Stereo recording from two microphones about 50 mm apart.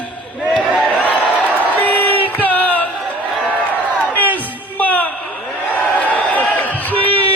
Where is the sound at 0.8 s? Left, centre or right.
Left.